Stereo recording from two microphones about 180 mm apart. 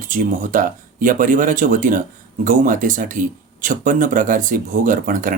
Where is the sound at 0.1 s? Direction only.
50° right (ahead or behind).